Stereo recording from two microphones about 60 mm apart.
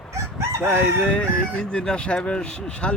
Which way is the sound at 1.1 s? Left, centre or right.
Centre.